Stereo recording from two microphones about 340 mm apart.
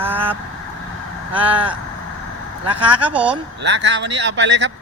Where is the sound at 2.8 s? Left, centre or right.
Centre.